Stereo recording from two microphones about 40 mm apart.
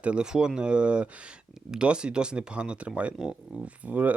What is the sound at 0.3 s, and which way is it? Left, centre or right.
Speech, centre.